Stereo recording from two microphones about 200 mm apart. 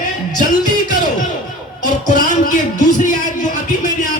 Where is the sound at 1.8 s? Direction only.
40° left (ahead or behind).